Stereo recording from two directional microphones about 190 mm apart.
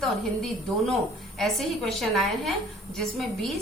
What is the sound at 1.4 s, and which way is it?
A woman's voice, centre (ahead or behind).